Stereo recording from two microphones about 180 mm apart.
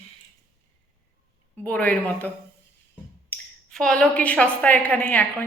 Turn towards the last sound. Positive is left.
turn(degrees=10)  # may be behind; listen again after turning